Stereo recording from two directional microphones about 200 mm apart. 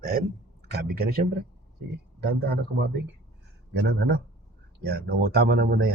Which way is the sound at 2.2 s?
55° right (ahead or behind).